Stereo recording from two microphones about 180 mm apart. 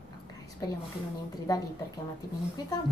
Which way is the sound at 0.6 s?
20° left (ahead or behind).